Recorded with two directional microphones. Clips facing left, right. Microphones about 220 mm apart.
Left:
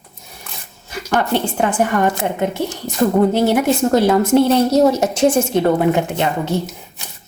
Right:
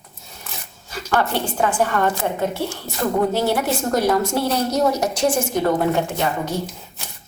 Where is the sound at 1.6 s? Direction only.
15° left (ahead or behind).